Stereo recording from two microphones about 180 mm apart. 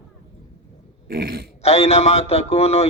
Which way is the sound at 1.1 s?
60° right (ahead or behind).